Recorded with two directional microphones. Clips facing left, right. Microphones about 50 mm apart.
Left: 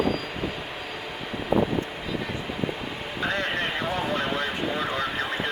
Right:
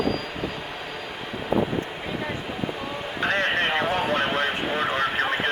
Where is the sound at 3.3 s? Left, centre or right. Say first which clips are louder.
Right 5 dB; right.